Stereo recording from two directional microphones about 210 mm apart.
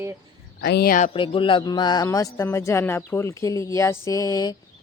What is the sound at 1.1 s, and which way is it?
A man's voice, 25° left (ahead or behind).